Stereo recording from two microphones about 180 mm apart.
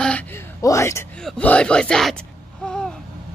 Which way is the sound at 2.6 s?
5° left (ahead or behind).